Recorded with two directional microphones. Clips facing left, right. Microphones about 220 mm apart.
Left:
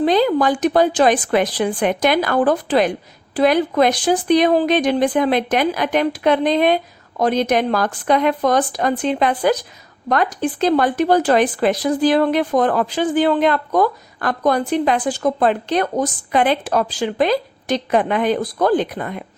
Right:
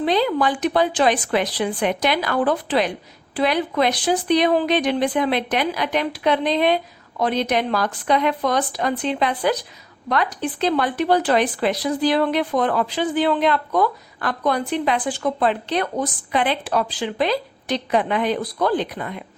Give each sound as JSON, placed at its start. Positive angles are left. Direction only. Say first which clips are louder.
{"t": 0.0, "sound": "speech", "louder": "left 4 dB", "side_deg": 45}